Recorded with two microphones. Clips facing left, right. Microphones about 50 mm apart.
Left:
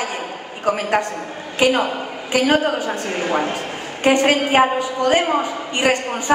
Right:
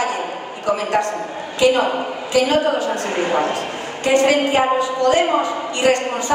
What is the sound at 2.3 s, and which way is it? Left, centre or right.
Speech, left.